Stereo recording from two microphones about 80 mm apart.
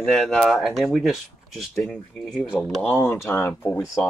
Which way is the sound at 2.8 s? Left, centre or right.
Left.